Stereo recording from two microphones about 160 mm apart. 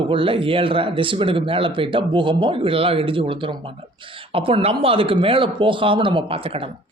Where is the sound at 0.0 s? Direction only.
35° right (ahead or behind).